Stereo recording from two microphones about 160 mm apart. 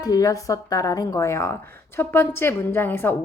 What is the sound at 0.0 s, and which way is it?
A woman's voice, 20° left (ahead or behind).